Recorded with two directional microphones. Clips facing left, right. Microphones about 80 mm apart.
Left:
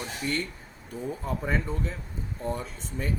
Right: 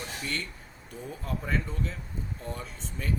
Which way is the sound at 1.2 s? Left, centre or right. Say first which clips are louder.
Left 1 dB; centre.